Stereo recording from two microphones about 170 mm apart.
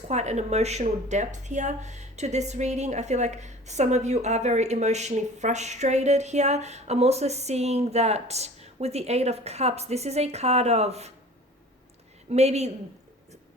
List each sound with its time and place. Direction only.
0.1 s speech: 40° right (ahead or behind)
12.3 s speech: 40° right (ahead or behind)